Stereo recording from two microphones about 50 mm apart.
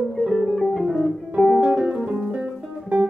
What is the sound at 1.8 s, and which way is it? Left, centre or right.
Music, right.